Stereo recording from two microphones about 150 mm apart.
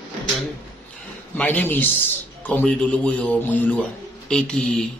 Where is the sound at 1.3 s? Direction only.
10° left (ahead or behind).